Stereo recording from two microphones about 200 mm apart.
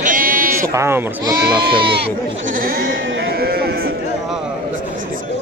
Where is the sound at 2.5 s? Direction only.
45° right (ahead or behind).